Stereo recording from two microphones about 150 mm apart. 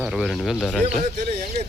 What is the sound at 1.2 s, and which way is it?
Speech, 90° right.